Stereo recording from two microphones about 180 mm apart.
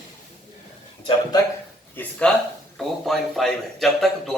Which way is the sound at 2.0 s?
5° left (ahead or behind).